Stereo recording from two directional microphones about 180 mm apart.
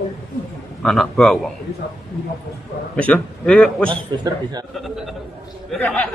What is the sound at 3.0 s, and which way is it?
Speech, 5° left (ahead or behind).